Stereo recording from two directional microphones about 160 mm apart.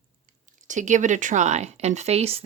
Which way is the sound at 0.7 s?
50° right (ahead or behind).